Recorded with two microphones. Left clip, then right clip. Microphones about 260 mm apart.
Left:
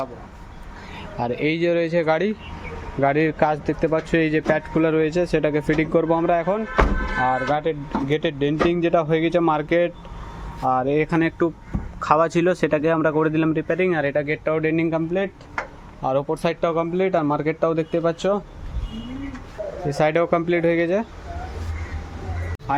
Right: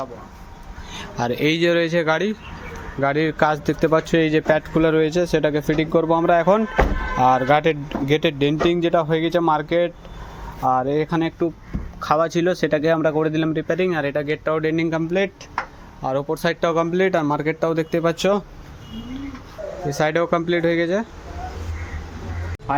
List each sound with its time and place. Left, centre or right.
0.9 s a man's voice: centre
19.9 s speech: centre
22.7 s a man's voice: centre